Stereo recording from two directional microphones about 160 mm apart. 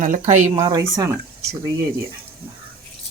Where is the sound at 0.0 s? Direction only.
55° right (ahead or behind).